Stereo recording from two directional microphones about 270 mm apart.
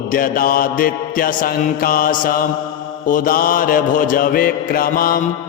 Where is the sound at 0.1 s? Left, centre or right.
Left.